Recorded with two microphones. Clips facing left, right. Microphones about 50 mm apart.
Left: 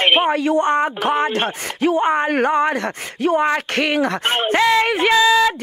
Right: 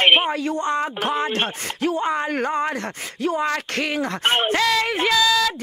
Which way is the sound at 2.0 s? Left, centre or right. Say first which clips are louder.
Left 5 dB; left.